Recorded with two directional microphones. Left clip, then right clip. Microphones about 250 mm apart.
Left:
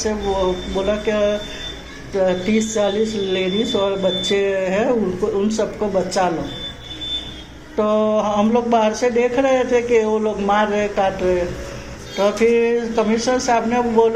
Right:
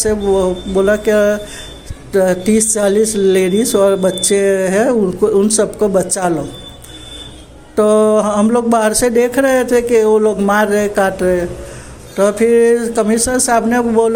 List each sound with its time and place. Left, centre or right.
0.1 s speech: right
7.8 s speech: right